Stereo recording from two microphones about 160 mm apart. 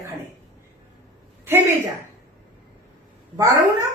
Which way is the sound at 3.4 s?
20° right (ahead or behind).